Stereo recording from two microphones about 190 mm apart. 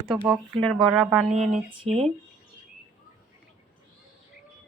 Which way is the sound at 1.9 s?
30° right (ahead or behind).